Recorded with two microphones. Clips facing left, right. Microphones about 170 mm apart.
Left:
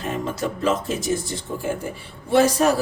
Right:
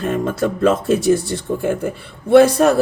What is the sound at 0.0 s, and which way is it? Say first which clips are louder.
A man's voice: right 7 dB; 55° right (ahead or behind).